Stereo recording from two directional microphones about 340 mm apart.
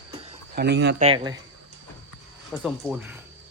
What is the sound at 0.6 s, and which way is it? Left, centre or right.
Speech, right.